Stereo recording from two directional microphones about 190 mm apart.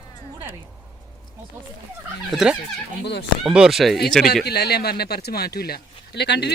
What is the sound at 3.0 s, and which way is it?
Speech, 65° left (ahead or behind).